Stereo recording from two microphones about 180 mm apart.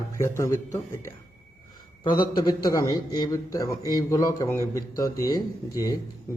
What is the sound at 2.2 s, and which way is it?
A man's voice, 25° left (ahead or behind).